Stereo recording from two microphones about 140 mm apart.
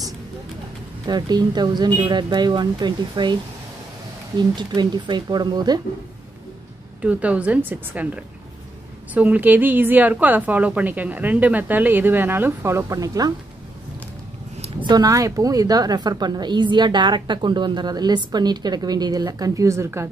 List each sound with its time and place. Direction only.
1.0 s speech: 30° right (ahead or behind)
4.4 s speech: 30° right (ahead or behind)
7.0 s a woman's voice: 10° right (ahead or behind); by 13.3 s 25° right (ahead or behind)
14.6 s a woman's voice: 35° right (ahead or behind)